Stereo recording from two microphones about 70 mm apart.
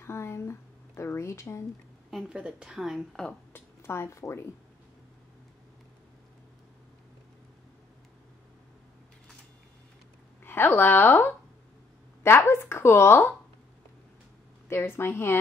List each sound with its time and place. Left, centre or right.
0.0 s a sound: left
2.2 s speech: centre
3.5 s speech: left
10.4 s a woman's voice: left
14.7 s speech: left